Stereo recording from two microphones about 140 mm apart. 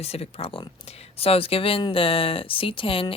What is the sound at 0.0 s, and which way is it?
Speech, 45° left (ahead or behind).